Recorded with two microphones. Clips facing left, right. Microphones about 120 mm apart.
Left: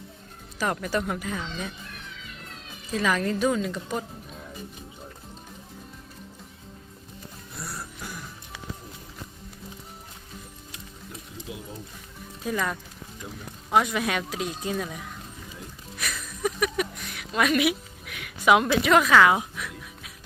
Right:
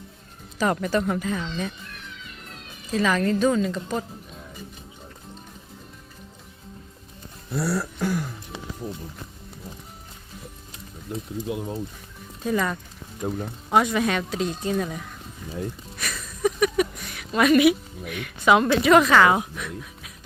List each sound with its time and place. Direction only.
0.6 s speech: 5° left (ahead or behind)
2.9 s a woman's voice: 5° left (ahead or behind)
7.5 s a sound: 90° right; by 8.3 s 70° right (ahead or behind)
11.4 s speech: 65° right (ahead or behind)
12.4 s speech: centre (ahead or behind)
16.0 s a sound: centre (ahead or behind)